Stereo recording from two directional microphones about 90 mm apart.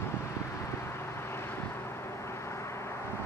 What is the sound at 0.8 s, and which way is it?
Vehicle, 30° left (ahead or behind).